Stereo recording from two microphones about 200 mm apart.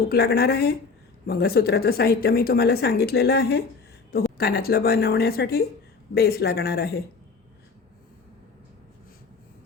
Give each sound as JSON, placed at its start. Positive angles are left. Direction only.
{"t": 0.1, "sound": "a woman's voice", "side_deg": 50}